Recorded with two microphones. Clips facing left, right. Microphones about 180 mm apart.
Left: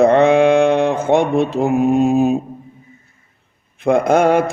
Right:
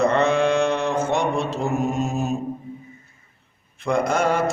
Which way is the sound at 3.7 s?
55° left (ahead or behind).